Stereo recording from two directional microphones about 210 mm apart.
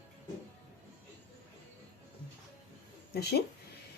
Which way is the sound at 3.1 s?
50° left (ahead or behind).